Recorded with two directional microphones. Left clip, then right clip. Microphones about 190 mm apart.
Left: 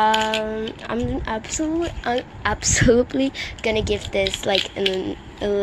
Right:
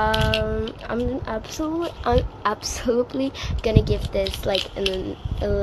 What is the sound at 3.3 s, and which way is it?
Speech, centre (ahead or behind).